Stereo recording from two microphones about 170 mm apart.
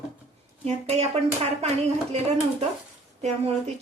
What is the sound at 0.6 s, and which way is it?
Speech, 40° right (ahead or behind).